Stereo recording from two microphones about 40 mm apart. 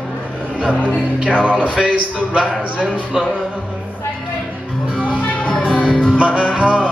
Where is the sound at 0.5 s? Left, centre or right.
Right.